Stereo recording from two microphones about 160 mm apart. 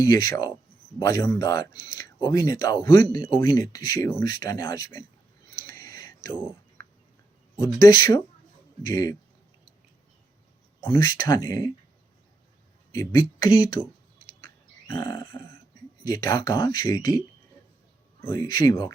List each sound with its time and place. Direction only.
0.0 s speech: 25° left (ahead or behind)
5.6 s whispering: 20° left (ahead or behind)
7.5 s speech: 25° left (ahead or behind)
10.8 s speech: 20° left (ahead or behind)
12.9 s speech: 25° left (ahead or behind)
14.8 s a sound: 20° left (ahead or behind)
16.0 s speech: 25° left (ahead or behind)
18.3 s speech: 20° left (ahead or behind)